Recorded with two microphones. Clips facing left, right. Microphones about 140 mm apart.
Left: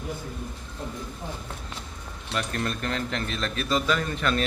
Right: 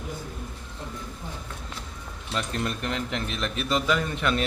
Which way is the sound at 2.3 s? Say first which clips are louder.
Even; 20° right (ahead or behind).